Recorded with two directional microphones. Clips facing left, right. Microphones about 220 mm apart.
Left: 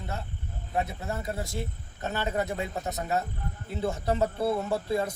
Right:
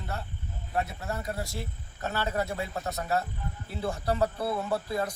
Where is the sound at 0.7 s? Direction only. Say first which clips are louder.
Left 1 dB; 20° left (ahead or behind).